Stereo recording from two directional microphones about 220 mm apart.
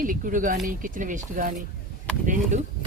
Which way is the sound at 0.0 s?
35° right (ahead or behind).